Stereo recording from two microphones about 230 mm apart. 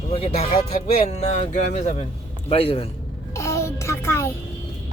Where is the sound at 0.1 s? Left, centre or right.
Left.